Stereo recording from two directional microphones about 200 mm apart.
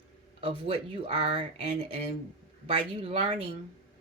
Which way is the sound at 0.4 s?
30° right (ahead or behind).